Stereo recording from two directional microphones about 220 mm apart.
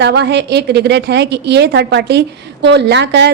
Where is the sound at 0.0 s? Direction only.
50° right (ahead or behind).